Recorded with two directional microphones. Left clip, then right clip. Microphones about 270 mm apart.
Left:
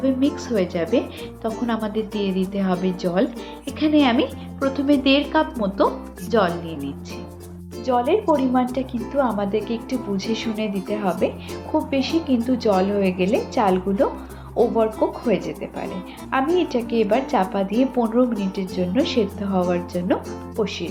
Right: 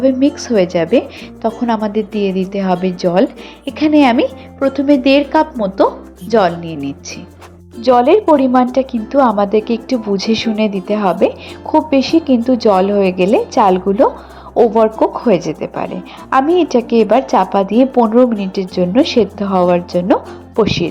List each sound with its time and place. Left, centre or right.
0.0 s a woman's voice: right